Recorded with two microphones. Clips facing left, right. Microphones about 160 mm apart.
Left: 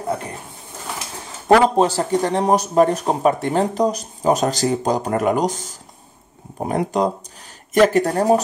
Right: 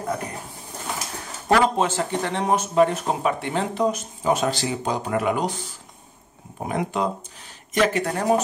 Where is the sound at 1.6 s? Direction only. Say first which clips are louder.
Left 5 dB; 35° left (ahead or behind).